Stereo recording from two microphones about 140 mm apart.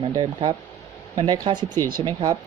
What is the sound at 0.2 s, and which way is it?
Speech, 35° right (ahead or behind).